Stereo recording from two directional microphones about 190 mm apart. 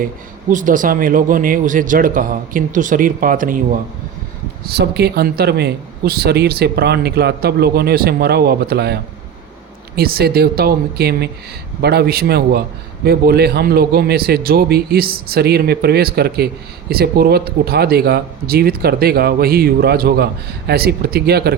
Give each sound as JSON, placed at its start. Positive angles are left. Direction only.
{"t": 0.5, "sound": "a man's voice", "side_deg": -45}
{"t": 4.7, "sound": "speech", "side_deg": -55}